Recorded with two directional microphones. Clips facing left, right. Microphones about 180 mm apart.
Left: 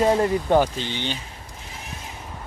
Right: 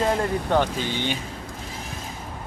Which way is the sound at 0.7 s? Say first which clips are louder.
Right 2 dB; 45° right (ahead or behind).